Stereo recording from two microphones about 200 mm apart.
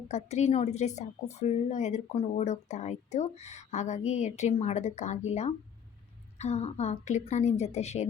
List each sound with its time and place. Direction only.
0.1 s a woman's voice: 35° left (ahead or behind)